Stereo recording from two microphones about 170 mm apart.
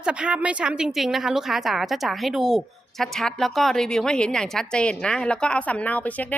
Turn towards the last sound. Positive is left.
turn(degrees=10)  # may be behind; listen again after turning